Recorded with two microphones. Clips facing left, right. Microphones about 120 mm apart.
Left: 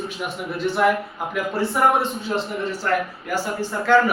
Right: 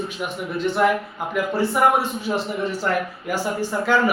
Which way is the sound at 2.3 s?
10° right (ahead or behind).